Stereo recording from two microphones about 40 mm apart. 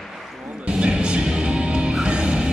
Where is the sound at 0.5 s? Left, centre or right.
Right.